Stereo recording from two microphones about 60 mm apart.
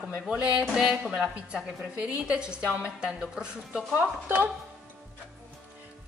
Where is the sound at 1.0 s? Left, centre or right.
Centre.